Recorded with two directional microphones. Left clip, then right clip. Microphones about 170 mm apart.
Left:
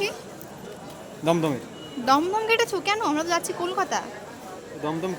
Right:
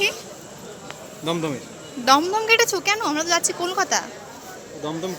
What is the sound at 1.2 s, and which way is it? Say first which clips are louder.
Speech: left 2 dB; 30° left (ahead or behind).